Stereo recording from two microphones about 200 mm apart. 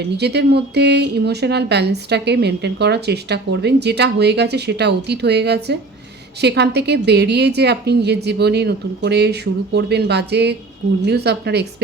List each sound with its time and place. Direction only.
0.2 s speech: 55° right (ahead or behind)